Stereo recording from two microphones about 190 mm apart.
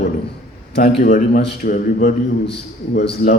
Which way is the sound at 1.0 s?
45° left (ahead or behind).